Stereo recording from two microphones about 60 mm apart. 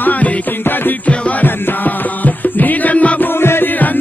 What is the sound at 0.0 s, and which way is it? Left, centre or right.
Music, left.